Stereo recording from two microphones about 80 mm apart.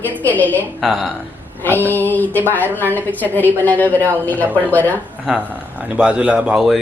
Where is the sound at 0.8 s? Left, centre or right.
Centre.